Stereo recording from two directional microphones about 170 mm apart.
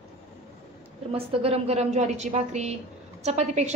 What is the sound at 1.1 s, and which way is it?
A woman's voice, 35° right (ahead or behind).